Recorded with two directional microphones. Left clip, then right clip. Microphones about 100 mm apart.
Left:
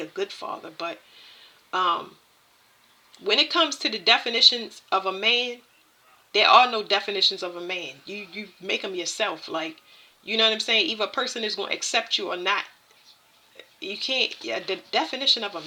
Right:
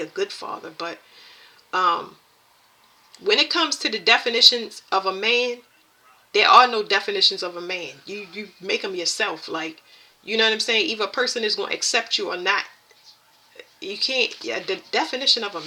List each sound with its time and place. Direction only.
0.0 s speech: 15° left (ahead or behind)
3.1 s speech: 15° left (ahead or behind)